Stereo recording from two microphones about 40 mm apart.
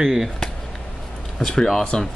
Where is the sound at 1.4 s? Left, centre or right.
Centre.